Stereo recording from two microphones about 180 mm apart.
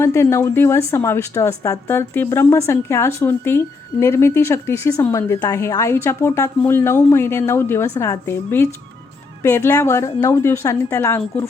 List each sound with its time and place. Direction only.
0.0 s a woman's voice: 15° left (ahead or behind)